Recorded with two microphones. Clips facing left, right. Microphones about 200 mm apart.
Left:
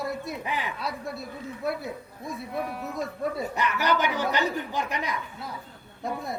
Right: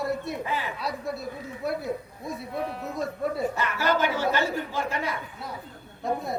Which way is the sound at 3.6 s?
15° left (ahead or behind).